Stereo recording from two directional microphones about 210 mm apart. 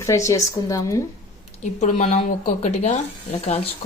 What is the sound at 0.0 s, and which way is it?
Speech, 15° left (ahead or behind).